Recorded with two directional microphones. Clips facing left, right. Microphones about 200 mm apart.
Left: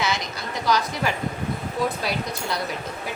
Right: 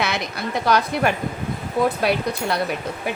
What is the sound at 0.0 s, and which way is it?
A woman's voice, 60° right (ahead or behind).